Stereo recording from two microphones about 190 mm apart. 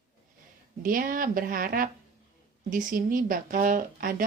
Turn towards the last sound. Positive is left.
turn(degrees=-45)  # may be behind; listen again after turning